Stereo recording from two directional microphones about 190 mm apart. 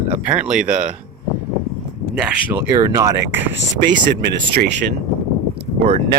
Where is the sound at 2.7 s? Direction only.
15° right (ahead or behind).